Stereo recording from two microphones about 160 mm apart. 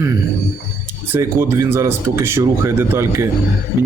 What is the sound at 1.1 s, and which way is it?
Speech, 15° right (ahead or behind).